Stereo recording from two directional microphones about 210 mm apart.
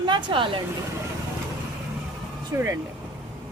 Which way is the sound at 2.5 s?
15° right (ahead or behind).